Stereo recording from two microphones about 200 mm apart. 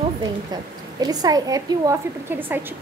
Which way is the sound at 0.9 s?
20° right (ahead or behind).